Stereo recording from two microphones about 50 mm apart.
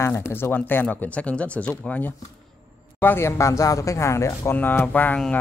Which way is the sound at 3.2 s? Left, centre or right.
Left.